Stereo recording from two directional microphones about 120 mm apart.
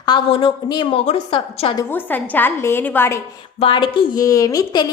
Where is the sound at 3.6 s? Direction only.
45° left (ahead or behind).